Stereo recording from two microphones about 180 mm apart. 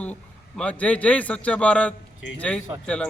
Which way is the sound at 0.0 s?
5° left (ahead or behind).